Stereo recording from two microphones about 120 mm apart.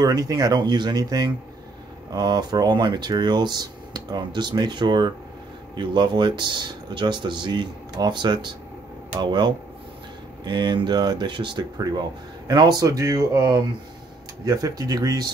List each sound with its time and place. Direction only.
0.0 s speech: 30° right (ahead or behind)